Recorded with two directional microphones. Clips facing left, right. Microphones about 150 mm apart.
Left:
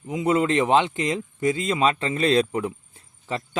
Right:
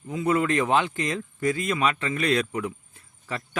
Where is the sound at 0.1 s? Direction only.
20° left (ahead or behind).